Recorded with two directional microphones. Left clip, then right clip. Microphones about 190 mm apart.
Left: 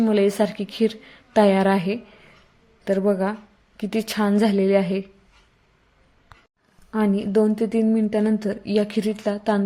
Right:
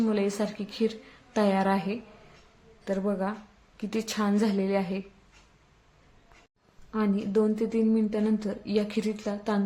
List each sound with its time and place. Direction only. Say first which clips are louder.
0.0 s a woman's voice: left 9 dB; 30° left (ahead or behind)
6.9 s a woman's voice: left 6 dB; 30° left (ahead or behind)